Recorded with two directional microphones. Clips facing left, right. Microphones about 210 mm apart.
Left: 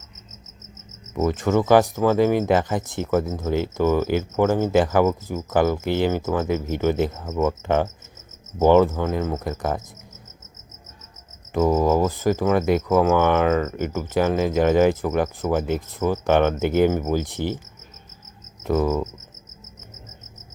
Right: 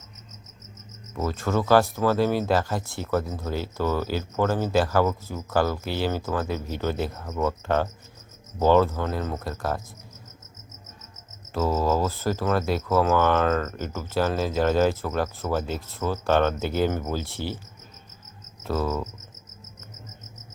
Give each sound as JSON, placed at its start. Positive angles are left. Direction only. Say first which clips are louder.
{"t": 1.1, "sound": "speech", "louder": "left 6 dB", "side_deg": 20}
{"t": 11.5, "sound": "speech", "louder": "left 5 dB", "side_deg": 15}
{"t": 18.7, "sound": "speech", "louder": "left 6 dB", "side_deg": 15}